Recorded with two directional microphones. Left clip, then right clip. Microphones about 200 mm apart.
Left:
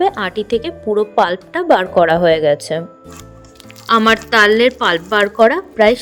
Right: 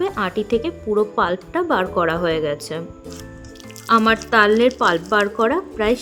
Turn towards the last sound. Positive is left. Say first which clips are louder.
# left 7 dB
turn(degrees=20)  # may be behind; listen again after turning